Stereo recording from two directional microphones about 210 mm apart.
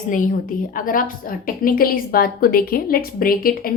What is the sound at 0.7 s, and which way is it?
A woman's voice, 40° left (ahead or behind).